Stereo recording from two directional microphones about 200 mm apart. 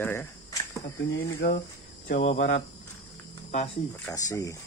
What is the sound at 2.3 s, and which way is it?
Speech, 75° left (ahead or behind).